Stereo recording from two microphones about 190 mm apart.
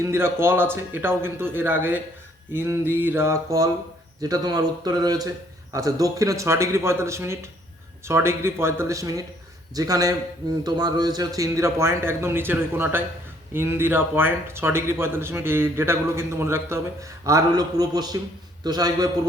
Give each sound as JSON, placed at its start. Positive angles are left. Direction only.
{"t": 0.0, "sound": "a man's voice", "side_deg": -15}